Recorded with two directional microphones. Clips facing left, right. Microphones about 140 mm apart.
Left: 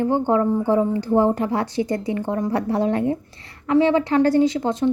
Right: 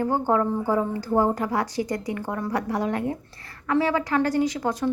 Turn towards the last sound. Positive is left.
turn(degrees=25)  # may be behind; listen again after turning